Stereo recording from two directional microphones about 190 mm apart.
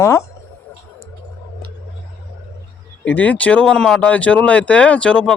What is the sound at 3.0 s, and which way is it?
Speech, 10° left (ahead or behind).